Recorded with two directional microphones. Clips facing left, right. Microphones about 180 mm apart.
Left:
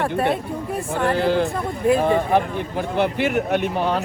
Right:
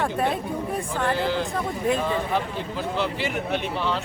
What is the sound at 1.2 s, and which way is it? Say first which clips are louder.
Speech: left 5 dB; 55° left (ahead or behind).